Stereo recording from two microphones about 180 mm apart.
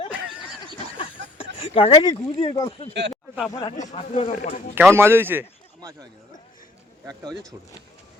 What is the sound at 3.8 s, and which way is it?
Speech, 30° left (ahead or behind).